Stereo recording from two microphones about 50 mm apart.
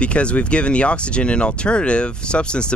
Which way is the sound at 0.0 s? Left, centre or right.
Left.